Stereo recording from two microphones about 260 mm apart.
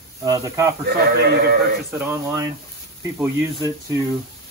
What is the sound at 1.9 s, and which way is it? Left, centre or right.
Speech, centre.